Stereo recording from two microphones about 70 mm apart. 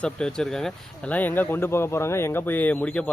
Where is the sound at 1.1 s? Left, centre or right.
Left.